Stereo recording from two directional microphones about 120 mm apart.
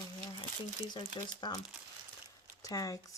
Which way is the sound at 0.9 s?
40° left (ahead or behind).